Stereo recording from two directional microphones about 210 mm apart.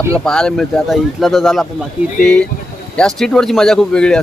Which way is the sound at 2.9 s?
Centre (ahead or behind).